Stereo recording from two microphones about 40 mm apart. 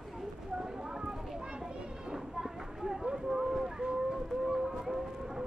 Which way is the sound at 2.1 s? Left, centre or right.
Centre.